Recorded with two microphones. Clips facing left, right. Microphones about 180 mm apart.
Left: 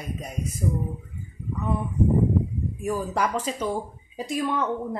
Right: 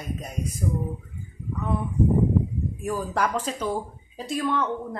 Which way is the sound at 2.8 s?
10° left (ahead or behind).